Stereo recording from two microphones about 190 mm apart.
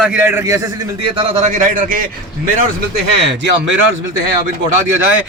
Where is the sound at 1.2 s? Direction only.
35° right (ahead or behind).